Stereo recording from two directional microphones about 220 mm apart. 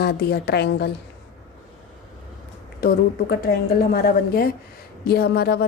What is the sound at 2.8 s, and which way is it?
A woman's voice, 45° left (ahead or behind).